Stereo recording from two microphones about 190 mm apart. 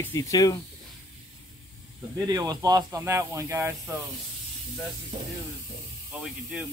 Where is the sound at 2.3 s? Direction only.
15° right (ahead or behind).